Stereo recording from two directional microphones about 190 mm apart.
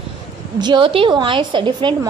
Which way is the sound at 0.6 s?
25° right (ahead or behind).